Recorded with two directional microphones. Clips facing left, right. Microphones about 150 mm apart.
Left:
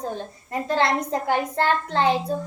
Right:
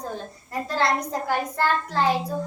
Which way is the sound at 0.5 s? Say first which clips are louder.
Left 2 dB; 20° left (ahead or behind).